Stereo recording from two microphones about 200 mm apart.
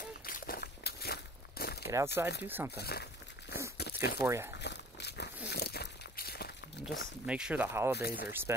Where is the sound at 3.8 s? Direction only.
50° left (ahead or behind).